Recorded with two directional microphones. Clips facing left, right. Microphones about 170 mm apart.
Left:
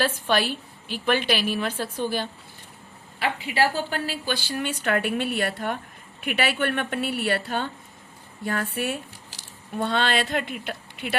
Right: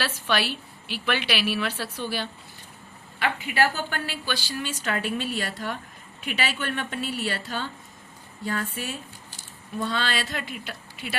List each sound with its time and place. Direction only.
0.0 s a woman's voice: 50° left (ahead or behind)
3.2 s a woman's voice: 30° left (ahead or behind); by 11.2 s 55° left (ahead or behind)